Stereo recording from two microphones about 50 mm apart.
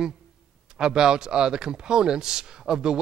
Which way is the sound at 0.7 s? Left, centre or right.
Centre.